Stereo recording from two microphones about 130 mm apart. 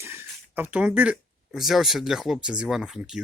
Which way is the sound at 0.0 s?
20° right (ahead or behind).